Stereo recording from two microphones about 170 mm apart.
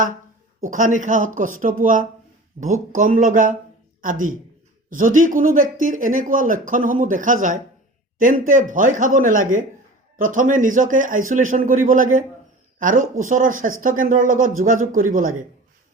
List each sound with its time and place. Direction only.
0.7 s speech: 50° right (ahead or behind)